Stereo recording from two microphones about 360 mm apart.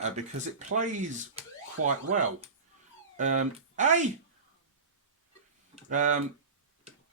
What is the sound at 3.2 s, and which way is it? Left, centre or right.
Speech, centre.